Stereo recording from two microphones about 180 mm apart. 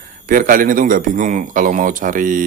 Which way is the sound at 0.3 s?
50° right (ahead or behind).